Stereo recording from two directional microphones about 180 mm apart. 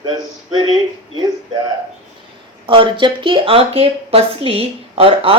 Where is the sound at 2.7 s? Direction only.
25° right (ahead or behind).